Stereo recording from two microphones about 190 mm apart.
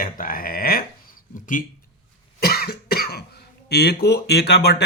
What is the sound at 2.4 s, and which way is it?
Cough, 55° left (ahead or behind).